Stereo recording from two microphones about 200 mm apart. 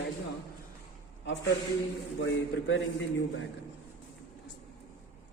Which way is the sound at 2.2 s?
60° left (ahead or behind).